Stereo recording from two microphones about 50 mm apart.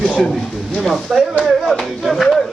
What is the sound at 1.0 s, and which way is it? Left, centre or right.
Speech, centre.